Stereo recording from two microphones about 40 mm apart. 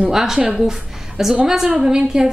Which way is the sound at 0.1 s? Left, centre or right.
Centre.